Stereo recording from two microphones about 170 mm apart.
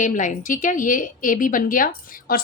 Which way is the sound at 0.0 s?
50° left (ahead or behind).